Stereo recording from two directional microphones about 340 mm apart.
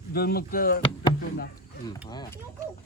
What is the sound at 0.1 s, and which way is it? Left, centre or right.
Speech, left.